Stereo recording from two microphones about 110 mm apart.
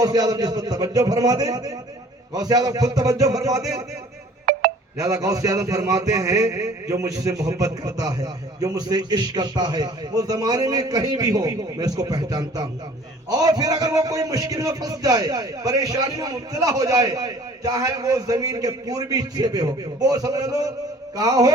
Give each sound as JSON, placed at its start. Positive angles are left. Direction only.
{"t": 0.0, "sound": "a man's voice", "side_deg": -35}
{"t": 4.9, "sound": "a man's voice", "side_deg": -30}